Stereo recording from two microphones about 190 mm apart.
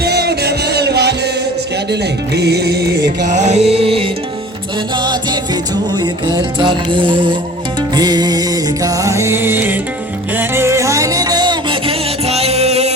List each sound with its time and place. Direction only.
0.0 s music: 60° right (ahead or behind)
3.2 s music: 40° right (ahead or behind)